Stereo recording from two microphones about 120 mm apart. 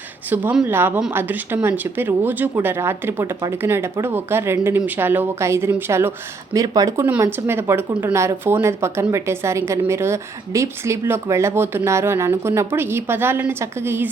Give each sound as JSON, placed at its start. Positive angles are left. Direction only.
{"t": 0.5, "sound": "speech", "side_deg": -15}